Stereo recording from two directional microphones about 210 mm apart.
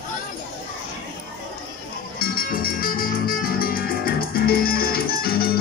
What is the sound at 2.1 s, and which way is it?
Music, 45° left (ahead or behind).